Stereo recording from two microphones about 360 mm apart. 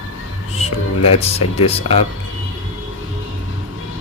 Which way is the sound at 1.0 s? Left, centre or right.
Centre.